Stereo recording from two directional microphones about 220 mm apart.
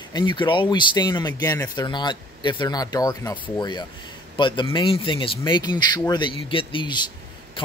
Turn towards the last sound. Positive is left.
turn(degrees=20)  # may be behind; listen again after turning